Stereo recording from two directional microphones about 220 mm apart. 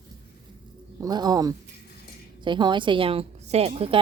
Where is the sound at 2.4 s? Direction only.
20° right (ahead or behind).